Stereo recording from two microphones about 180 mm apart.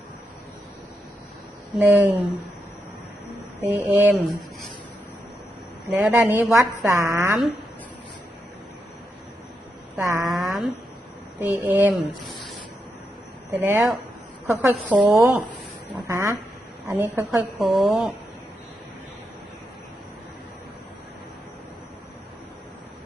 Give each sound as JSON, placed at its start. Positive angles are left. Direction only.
{"t": 1.8, "sound": "a woman's voice", "side_deg": -10}
{"t": 3.6, "sound": "a woman's voice", "side_deg": -10}
{"t": 5.9, "sound": "a woman's voice", "side_deg": -10}
{"t": 10.0, "sound": "a woman's voice", "side_deg": -15}
{"t": 10.2, "sound": "a sound", "side_deg": 0}
{"t": 11.3, "sound": "a woman's voice", "side_deg": -10}
{"t": 13.5, "sound": "a woman's voice", "side_deg": -10}
{"t": 17.7, "sound": "speech", "side_deg": 0}